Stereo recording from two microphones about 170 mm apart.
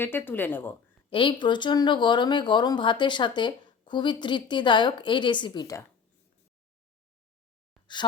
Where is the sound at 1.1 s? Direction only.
30° left (ahead or behind).